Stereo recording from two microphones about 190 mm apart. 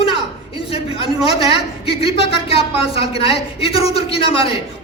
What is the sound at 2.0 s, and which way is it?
A man's voice, 30° left (ahead or behind).